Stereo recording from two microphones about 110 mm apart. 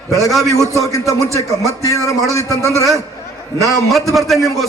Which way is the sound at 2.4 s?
30° right (ahead or behind).